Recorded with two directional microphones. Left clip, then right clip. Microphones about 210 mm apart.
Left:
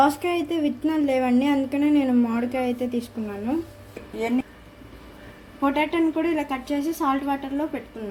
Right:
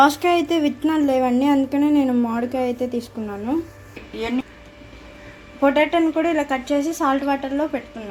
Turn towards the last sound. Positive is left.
turn(degrees=-20)  # may be behind; listen again after turning